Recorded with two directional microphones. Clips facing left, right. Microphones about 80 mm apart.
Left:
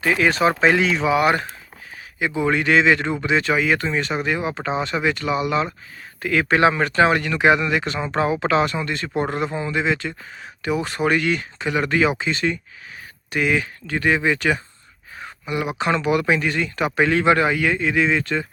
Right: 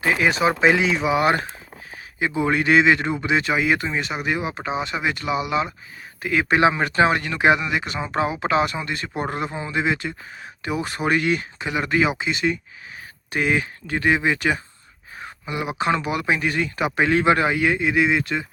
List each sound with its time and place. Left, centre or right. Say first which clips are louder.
0.0 s speech: left 1 dB; right
0.3 s speech: even; centre
1.0 s speech: left 1 dB; right
15.2 s a sound: left 3 dB; right
15.8 s speech: left 2 dB; right